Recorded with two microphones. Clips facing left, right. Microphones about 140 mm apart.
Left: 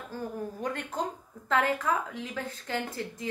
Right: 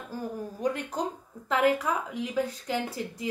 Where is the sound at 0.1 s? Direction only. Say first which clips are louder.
Right 1 dB; 10° right (ahead or behind).